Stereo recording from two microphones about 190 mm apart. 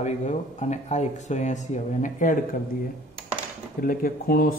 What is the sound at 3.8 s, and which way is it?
Speech, 45° left (ahead or behind).